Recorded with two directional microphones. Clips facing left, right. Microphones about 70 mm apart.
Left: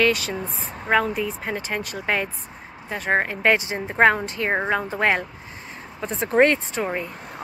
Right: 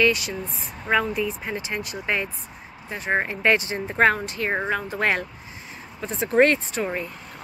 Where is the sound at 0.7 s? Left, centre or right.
Left.